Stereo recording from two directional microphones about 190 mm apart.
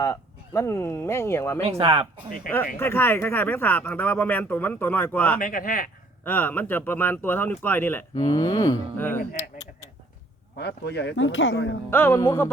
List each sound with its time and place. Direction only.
0.0 s speech: 15° left (ahead or behind)
1.6 s speech: 30° right (ahead or behind)
2.7 s speech: 10° left (ahead or behind)
5.4 s speech: 45° left (ahead or behind)
6.2 s speech: 10° left (ahead or behind)
10.6 s speech: 60° left (ahead or behind); by 11.8 s 75° left (ahead or behind)
11.9 s speech: 10° left (ahead or behind)